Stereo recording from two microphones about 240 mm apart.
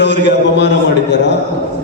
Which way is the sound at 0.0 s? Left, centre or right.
Left.